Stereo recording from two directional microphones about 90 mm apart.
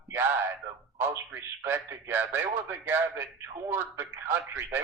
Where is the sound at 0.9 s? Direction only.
20° right (ahead or behind).